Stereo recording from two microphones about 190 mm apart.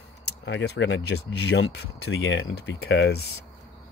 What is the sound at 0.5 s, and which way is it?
Speech, 70° left (ahead or behind).